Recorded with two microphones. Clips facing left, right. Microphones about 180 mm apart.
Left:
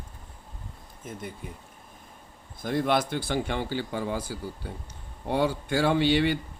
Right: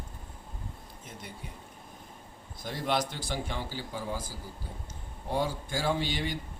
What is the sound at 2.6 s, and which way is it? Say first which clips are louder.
Speech: left 6 dB; 55° left (ahead or behind).